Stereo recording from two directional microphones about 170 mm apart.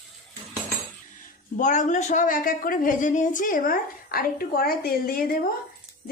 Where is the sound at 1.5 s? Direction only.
45° left (ahead or behind).